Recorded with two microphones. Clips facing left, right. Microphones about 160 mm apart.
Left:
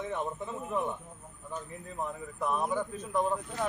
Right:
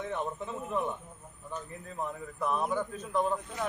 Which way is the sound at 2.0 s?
10° left (ahead or behind).